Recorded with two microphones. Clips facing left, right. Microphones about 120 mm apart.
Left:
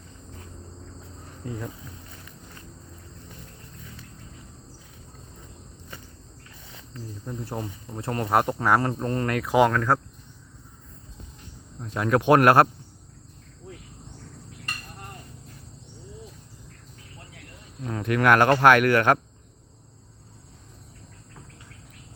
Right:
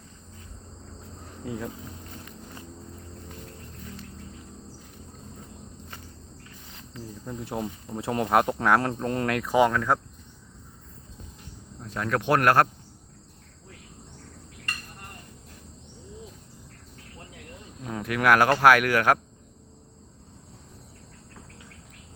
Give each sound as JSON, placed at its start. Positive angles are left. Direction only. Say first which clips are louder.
{"t": 1.5, "sound": "speech", "louder": "right 1 dB", "side_deg": -5}
{"t": 7.3, "sound": "speech", "louder": "right 1 dB", "side_deg": 0}
{"t": 11.8, "sound": "speech", "louder": "left 5 dB", "side_deg": 10}
{"t": 17.8, "sound": "speech", "louder": "left 2 dB", "side_deg": -5}